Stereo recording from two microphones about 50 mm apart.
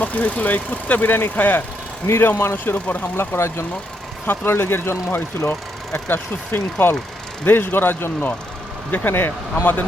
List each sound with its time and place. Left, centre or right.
0.0 s speech: left
2.0 s speech: left
2.7 s speech: left
3.2 s speech: left
5.5 s speech: left